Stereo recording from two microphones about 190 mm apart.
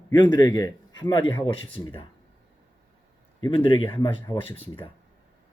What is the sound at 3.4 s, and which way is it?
Speech, 25° left (ahead or behind).